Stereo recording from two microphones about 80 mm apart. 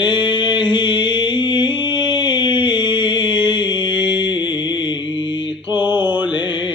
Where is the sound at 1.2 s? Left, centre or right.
Left.